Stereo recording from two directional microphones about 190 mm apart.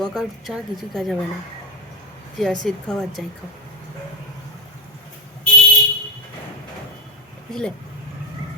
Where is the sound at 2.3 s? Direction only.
Centre (ahead or behind).